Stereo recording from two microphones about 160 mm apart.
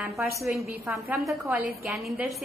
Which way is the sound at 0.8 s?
15° right (ahead or behind).